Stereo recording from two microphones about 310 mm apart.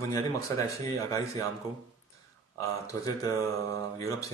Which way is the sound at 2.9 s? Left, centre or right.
Centre.